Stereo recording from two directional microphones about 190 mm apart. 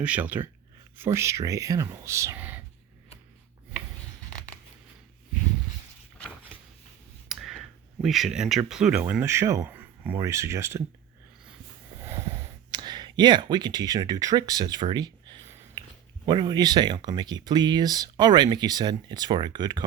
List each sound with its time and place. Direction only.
0.0 s speech: 5° right (ahead or behind)
7.3 s a sound: centre (ahead or behind)
8.0 s speech: centre (ahead or behind)
12.0 s wheeze: 15° right (ahead or behind)
12.7 s speech: 20° right (ahead or behind)